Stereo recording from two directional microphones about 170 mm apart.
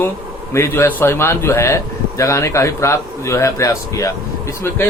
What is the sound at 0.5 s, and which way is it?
A man's voice, 15° left (ahead or behind).